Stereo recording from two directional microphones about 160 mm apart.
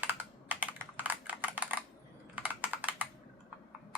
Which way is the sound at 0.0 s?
10° right (ahead or behind).